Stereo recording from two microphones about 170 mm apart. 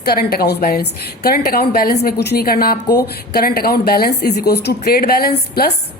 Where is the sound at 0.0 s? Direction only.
65° left (ahead or behind).